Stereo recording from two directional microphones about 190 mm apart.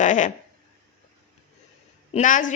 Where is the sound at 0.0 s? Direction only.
40° left (ahead or behind).